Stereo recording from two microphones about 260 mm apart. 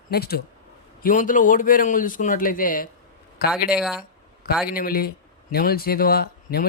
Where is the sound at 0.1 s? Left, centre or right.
Left.